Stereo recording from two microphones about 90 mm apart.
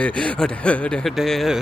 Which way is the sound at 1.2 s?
5° right (ahead or behind).